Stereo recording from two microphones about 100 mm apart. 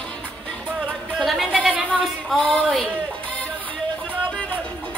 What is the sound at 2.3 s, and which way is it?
Speech, centre (ahead or behind).